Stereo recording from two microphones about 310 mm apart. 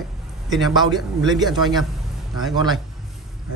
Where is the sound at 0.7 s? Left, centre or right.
Centre.